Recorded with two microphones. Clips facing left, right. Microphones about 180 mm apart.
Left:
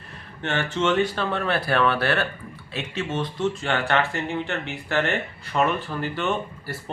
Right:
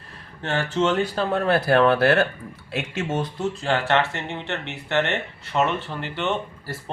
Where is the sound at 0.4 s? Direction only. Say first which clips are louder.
Right 1 dB; 35° right (ahead or behind).